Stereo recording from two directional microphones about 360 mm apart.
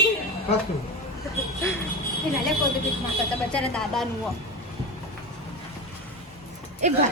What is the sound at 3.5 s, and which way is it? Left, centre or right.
Speech, centre.